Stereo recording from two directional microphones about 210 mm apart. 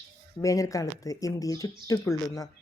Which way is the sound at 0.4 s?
15° left (ahead or behind).